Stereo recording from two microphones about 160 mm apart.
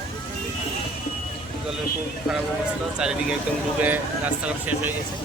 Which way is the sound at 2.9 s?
5° right (ahead or behind).